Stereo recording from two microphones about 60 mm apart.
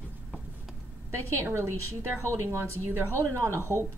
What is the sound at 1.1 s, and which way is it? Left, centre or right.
A woman's voice, right.